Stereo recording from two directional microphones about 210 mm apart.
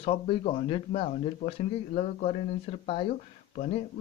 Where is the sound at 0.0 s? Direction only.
30° left (ahead or behind).